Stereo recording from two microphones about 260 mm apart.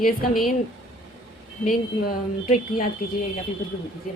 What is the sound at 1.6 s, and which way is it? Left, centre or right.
Speech, left.